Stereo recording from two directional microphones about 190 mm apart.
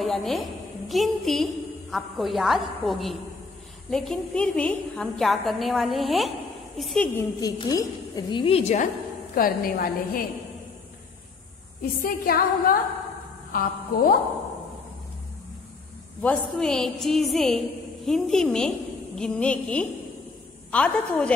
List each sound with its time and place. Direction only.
0.0 s a woman's voice: centre (ahead or behind)
7.2 s a woman's voice: 20° left (ahead or behind); by 8.8 s 35° left (ahead or behind)
9.3 s a woman's voice: 50° left (ahead or behind)
12.0 s a woman's voice: 50° left (ahead or behind)
16.2 s a woman's voice: 5° left (ahead or behind)